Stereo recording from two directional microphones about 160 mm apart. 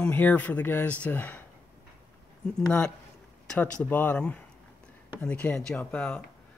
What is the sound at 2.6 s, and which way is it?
Speech, 10° left (ahead or behind).